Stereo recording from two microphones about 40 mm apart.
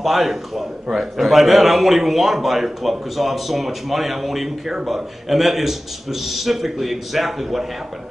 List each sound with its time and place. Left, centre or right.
0.0 s a man's voice: centre